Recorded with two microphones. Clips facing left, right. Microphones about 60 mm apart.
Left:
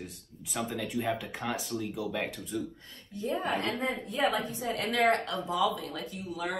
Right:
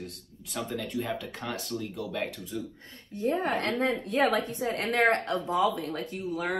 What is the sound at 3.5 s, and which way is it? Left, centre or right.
A woman's voice, right.